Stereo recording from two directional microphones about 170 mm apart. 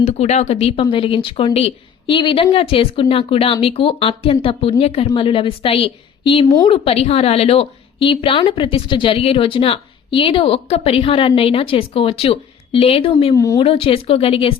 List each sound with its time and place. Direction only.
0.0 s speech: 40° left (ahead or behind)
13.3 s speech: 20° left (ahead or behind)
13.6 s speech: 35° left (ahead or behind)